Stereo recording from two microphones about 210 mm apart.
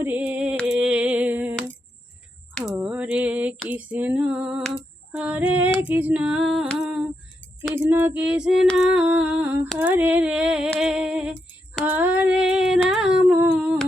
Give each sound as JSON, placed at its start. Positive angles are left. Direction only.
{"t": 0.0, "sound": "a sound", "side_deg": -10}
{"t": 2.7, "sound": "female singing", "side_deg": -5}
{"t": 5.9, "sound": "music", "side_deg": -10}
{"t": 7.6, "sound": "female singing", "side_deg": -10}
{"t": 11.9, "sound": "humming", "side_deg": -5}